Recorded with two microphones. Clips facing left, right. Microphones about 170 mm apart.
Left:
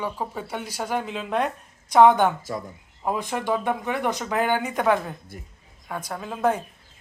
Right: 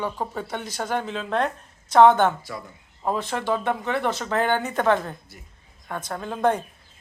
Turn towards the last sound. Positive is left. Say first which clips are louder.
# right 1 dB
turn(degrees=5)  # may be behind; listen again after turning